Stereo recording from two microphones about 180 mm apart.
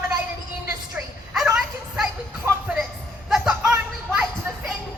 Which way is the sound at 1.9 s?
5° right (ahead or behind).